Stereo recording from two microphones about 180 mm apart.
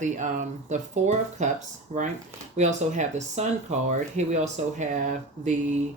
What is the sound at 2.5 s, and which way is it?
Speech, 40° right (ahead or behind).